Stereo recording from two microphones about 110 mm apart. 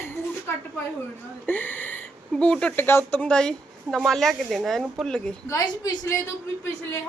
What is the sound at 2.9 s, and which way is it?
Speech, 20° left (ahead or behind).